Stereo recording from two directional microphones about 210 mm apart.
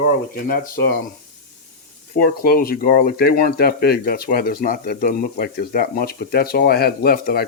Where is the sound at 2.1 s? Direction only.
45° left (ahead or behind).